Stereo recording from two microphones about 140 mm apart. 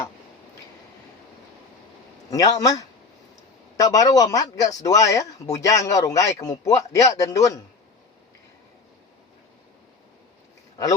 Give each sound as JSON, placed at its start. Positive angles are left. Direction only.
{"t": 2.3, "sound": "speech", "side_deg": 25}